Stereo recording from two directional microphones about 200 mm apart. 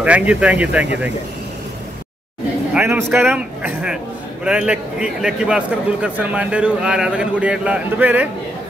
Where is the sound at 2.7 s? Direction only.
10° right (ahead or behind).